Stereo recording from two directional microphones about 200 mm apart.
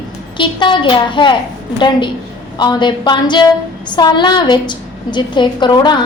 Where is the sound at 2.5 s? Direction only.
20° left (ahead or behind).